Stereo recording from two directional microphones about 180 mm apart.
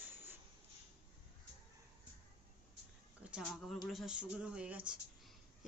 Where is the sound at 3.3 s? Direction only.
Centre (ahead or behind).